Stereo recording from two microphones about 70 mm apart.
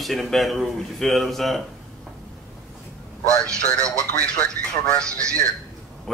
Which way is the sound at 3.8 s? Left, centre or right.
Left.